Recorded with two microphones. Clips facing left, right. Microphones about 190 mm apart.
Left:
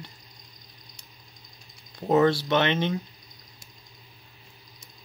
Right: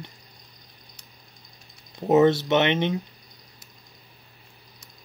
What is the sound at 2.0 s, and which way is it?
Speech, 20° right (ahead or behind).